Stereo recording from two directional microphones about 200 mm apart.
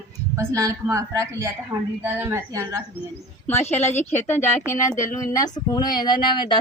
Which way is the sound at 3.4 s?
10° left (ahead or behind).